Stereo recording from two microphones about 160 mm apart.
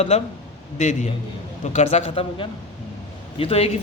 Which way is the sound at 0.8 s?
45° left (ahead or behind).